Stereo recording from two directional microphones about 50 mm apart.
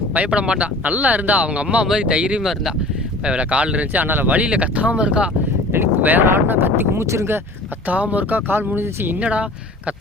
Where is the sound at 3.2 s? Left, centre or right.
Right.